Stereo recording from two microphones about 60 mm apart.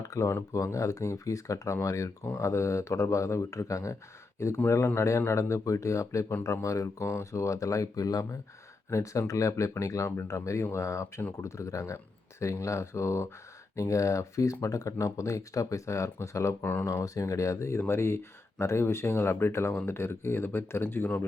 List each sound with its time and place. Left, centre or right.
0.0 s speech: left
8.9 s speech: left